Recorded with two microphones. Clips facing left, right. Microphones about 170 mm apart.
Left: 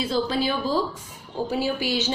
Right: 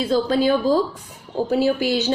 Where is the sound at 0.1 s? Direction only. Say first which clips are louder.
Right 9 dB; 45° right (ahead or behind).